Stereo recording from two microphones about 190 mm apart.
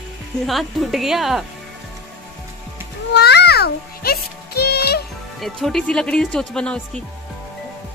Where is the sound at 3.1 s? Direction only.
60° left (ahead or behind).